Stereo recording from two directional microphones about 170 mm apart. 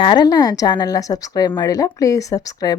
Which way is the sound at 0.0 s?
25° left (ahead or behind).